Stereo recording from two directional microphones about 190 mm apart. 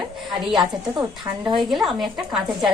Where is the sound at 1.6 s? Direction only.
Centre (ahead or behind).